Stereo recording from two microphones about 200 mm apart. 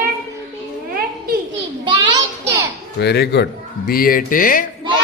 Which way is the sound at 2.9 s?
55° left (ahead or behind).